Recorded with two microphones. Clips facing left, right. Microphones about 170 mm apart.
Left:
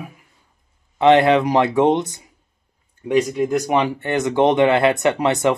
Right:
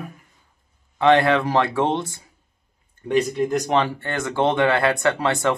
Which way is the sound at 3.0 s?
10° left (ahead or behind).